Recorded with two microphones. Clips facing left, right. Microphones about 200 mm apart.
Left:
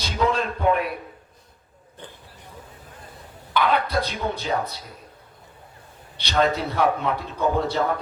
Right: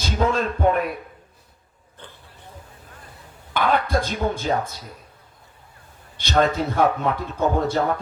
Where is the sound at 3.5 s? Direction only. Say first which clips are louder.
Right 1 dB; 50° right (ahead or behind).